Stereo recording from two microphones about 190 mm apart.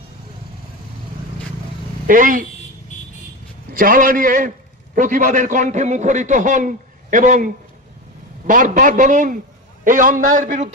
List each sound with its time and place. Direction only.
2.0 s a man's voice: 45° right (ahead or behind)
3.8 s a man's voice: 45° right (ahead or behind)